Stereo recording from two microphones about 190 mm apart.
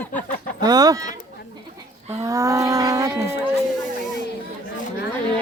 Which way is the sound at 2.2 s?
15° right (ahead or behind).